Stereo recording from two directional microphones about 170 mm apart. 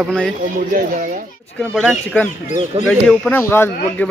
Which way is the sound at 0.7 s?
55° right (ahead or behind).